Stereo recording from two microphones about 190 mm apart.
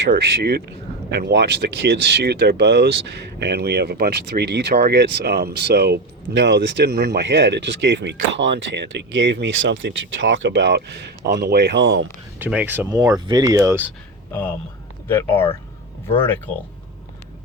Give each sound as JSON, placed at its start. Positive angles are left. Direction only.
{"t": 0.0, "sound": "speech", "side_deg": -60}
{"t": 12.4, "sound": "speech", "side_deg": -10}
{"t": 12.9, "sound": "speech", "side_deg": -20}
{"t": 15.0, "sound": "speech", "side_deg": 10}